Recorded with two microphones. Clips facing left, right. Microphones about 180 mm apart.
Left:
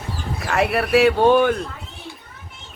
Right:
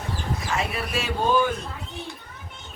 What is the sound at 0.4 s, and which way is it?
A man's voice, 65° left (ahead or behind).